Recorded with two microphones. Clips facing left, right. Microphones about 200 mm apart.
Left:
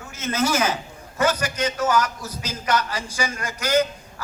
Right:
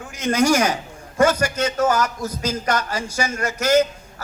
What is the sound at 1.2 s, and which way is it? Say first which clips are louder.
Speech: right 5 dB; 10° left (ahead or behind).